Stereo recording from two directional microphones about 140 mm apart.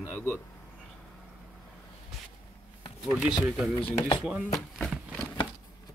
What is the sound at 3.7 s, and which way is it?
Speech, 40° left (ahead or behind).